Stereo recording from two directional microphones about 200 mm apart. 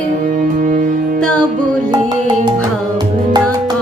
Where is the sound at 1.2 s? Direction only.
5° left (ahead or behind).